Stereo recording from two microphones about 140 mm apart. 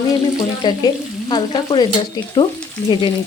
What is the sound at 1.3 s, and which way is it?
Speech, 35° left (ahead or behind).